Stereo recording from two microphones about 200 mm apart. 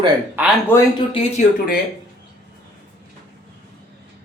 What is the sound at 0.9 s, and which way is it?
Speech, 30° left (ahead or behind).